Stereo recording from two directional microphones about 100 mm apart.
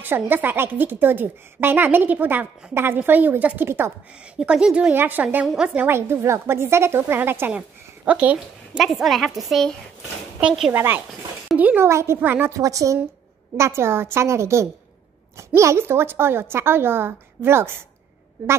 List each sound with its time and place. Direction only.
0.0 s a woman's voice: 20° right (ahead or behind)
4.4 s a woman's voice: 5° right (ahead or behind)
5.9 s a woman's voice: 25° right (ahead or behind)
8.7 s a woman's voice: centre (ahead or behind)
10.7 s a woman's voice: 20° right (ahead or behind)
11.8 s a woman's voice: 25° right (ahead or behind)
12.5 s a woman's voice: 35° right (ahead or behind)